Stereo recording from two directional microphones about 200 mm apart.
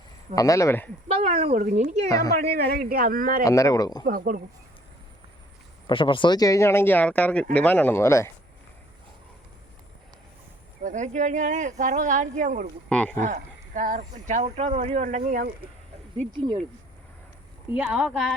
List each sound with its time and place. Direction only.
0.3 s speech: 15° left (ahead or behind)
1.0 s speech: 30° right (ahead or behind)
2.0 s speech: 15° left (ahead or behind)
2.3 s a man's voice: 50° right (ahead or behind)
3.4 s speech: 15° left (ahead or behind)
4.0 s a man's voice: 45° right (ahead or behind)
5.9 s speech: 25° left (ahead or behind)
10.8 s speech: 35° right (ahead or behind)
12.9 s speech: 5° left (ahead or behind)
13.2 s speech: 40° right (ahead or behind)
17.7 s a woman's voice: 5° right (ahead or behind)